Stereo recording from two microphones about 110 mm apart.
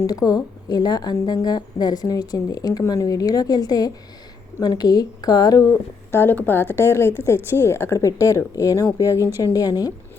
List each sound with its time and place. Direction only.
0.0 s a woman's voice: 35° left (ahead or behind)
6.1 s a woman's voice: 20° left (ahead or behind); by 9.9 s 35° left (ahead or behind)